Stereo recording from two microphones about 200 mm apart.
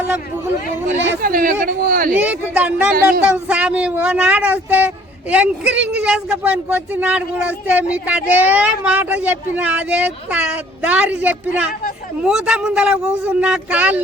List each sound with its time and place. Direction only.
1.2 s speech: 45° right (ahead or behind)
2.1 s a man's voice: 5° right (ahead or behind)